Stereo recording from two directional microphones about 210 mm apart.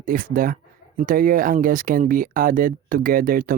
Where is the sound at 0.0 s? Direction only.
40° right (ahead or behind).